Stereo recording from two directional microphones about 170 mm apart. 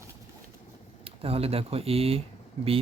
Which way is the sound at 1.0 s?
35° right (ahead or behind).